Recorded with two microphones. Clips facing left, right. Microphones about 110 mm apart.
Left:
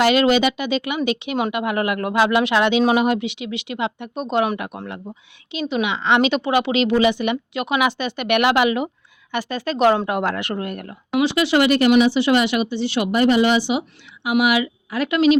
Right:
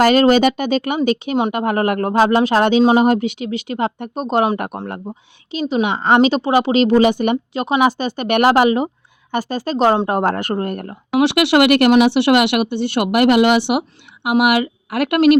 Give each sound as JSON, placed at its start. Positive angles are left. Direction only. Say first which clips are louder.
{"t": 0.0, "sound": "a woman's voice", "louder": "right 4 dB", "side_deg": -45}
{"t": 11.2, "sound": "speech", "louder": "right 4 dB", "side_deg": -65}